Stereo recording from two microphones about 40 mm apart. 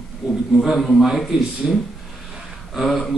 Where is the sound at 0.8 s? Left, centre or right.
Centre.